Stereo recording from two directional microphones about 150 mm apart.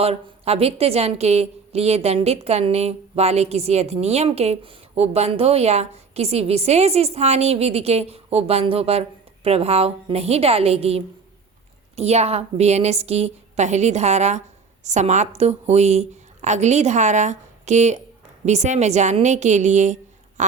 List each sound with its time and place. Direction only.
0.0 s a woman's voice: 40° right (ahead or behind)